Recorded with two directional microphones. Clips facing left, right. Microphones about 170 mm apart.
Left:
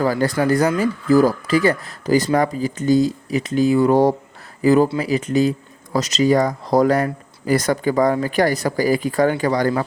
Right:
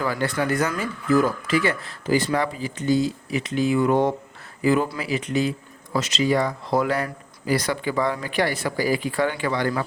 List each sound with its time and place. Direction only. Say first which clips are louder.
0.0 s speech: left 6 dB; 40° left (ahead or behind)